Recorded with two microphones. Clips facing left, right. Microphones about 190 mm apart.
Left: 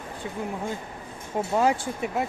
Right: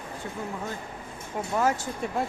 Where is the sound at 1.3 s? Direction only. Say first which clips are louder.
Left 3 dB; 20° left (ahead or behind).